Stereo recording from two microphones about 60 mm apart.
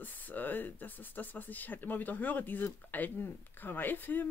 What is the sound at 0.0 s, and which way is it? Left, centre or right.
Speech, left.